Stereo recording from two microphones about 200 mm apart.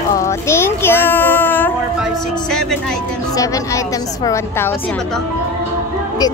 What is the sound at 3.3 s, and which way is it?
A woman's voice, 15° left (ahead or behind).